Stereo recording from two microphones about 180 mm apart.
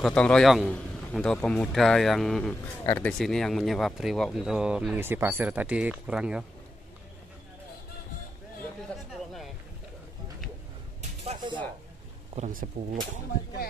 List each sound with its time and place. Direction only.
0.0 s speech: 5° left (ahead or behind)
12.4 s speech: 45° right (ahead or behind)